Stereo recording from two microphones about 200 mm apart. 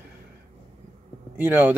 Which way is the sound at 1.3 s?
10° right (ahead or behind).